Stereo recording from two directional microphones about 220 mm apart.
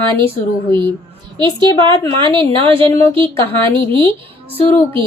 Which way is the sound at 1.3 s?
20° right (ahead or behind).